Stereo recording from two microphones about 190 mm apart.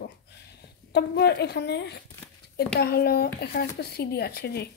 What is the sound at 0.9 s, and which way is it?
Speech, 60° left (ahead or behind).